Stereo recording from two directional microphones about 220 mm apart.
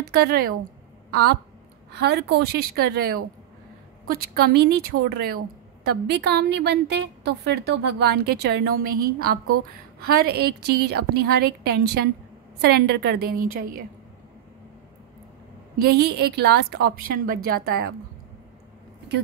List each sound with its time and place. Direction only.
0.1 s a woman's voice: 45° right (ahead or behind)
15.8 s a woman's voice: 45° right (ahead or behind)